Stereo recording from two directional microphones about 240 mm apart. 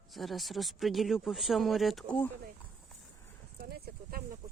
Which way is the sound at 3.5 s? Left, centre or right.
Right.